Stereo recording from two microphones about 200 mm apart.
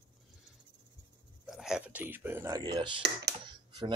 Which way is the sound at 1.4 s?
Centre (ahead or behind).